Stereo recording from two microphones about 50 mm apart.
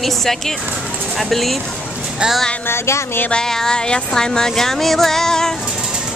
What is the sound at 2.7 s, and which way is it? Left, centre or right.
Speech, left.